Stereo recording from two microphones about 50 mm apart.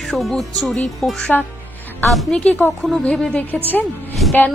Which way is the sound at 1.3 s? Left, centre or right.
Left.